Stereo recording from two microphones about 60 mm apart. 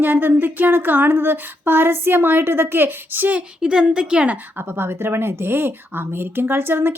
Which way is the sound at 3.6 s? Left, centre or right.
Centre.